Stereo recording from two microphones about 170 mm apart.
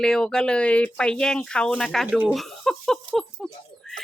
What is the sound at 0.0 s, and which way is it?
A woman's voice, 5° left (ahead or behind).